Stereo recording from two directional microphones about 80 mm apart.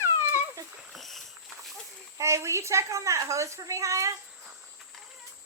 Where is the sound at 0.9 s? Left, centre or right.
Centre.